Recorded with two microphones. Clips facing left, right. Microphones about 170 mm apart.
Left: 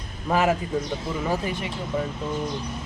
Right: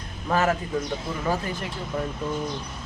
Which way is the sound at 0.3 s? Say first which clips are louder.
Left 1 dB; 15° left (ahead or behind).